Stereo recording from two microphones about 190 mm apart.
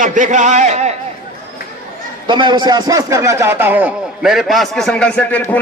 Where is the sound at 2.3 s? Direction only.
25° right (ahead or behind).